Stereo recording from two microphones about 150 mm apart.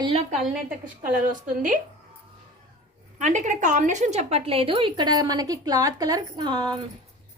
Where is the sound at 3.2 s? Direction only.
55° right (ahead or behind); by 6.8 s 30° right (ahead or behind).